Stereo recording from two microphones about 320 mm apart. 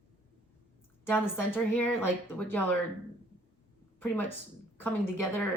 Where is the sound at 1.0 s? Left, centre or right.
Centre.